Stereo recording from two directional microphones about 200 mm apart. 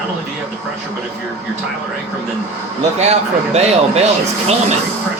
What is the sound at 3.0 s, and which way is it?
A man's voice, 35° right (ahead or behind).